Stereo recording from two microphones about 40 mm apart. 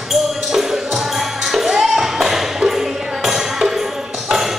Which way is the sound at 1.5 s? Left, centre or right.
Centre.